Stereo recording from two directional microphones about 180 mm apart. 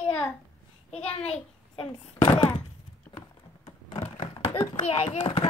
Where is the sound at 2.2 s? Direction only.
25° left (ahead or behind).